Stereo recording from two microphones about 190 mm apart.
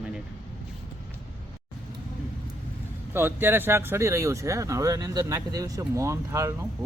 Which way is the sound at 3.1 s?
10° right (ahead or behind).